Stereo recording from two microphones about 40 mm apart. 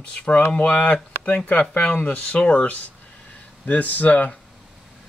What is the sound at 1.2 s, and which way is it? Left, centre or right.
Speech, left.